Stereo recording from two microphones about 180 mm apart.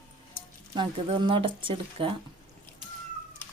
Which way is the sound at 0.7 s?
25° right (ahead or behind).